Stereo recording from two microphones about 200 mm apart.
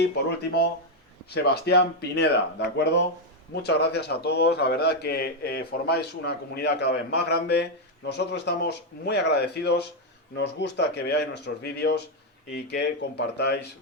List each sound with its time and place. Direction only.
1.3 s a man's voice: 55° left (ahead or behind)